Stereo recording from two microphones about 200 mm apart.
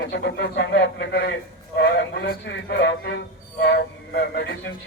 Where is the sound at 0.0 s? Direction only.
60° left (ahead or behind).